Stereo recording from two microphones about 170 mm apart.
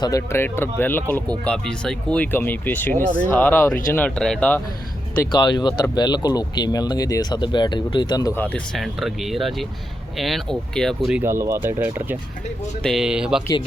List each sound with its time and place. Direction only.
0.0 s speech: 20° left (ahead or behind)
5.3 s speech: 25° left (ahead or behind)
8.4 s speech: 5° left (ahead or behind)
11.2 s speech: 15° right (ahead or behind)
12.8 s speech: centre (ahead or behind)